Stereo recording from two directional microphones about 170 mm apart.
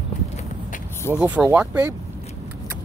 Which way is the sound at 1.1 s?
10° right (ahead or behind).